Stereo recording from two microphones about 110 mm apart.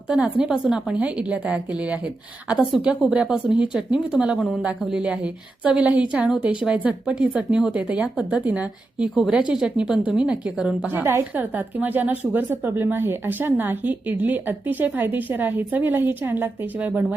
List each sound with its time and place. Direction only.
0.1 s a woman's voice: 5° right (ahead or behind)